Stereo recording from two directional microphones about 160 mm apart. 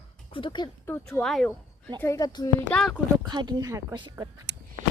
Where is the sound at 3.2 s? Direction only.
25° right (ahead or behind).